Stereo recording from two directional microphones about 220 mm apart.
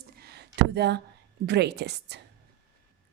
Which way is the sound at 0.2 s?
45° right (ahead or behind).